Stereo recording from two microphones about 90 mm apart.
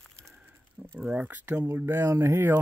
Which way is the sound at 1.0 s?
10° right (ahead or behind).